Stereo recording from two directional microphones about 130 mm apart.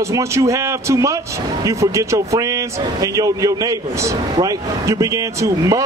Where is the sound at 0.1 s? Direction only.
25° right (ahead or behind).